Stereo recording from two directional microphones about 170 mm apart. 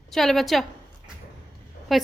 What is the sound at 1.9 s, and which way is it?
Speech, centre (ahead or behind).